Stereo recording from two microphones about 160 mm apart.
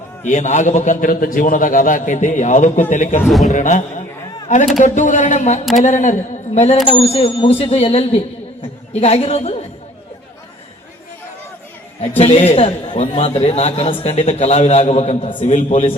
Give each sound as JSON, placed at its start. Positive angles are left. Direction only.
{"t": 0.3, "sound": "a man's voice", "side_deg": 50}
{"t": 3.2, "sound": "a man's voice", "side_deg": 0}
{"t": 3.5, "sound": "a man's voice", "side_deg": 50}
{"t": 6.9, "sound": "a man's voice", "side_deg": 35}
{"t": 12.1, "sound": "a man's voice", "side_deg": 40}